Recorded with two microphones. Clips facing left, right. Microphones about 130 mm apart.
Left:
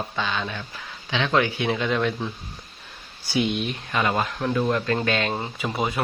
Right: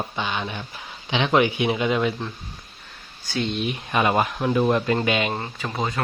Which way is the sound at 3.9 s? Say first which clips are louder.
Right 3 dB; 20° right (ahead or behind).